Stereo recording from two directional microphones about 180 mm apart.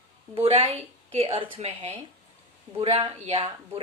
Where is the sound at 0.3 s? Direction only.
30° right (ahead or behind).